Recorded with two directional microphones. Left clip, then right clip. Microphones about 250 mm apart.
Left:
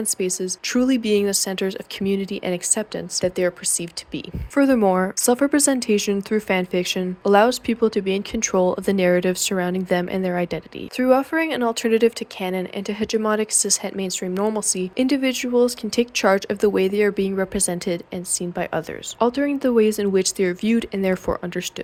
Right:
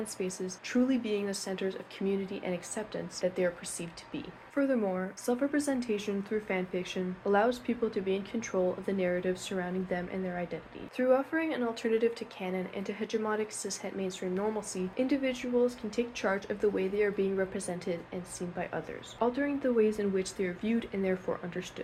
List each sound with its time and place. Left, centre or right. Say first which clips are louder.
0.0 s speech: left 12 dB; left